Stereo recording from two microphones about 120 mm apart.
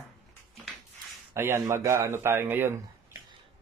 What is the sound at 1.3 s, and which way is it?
Speech, 20° right (ahead or behind).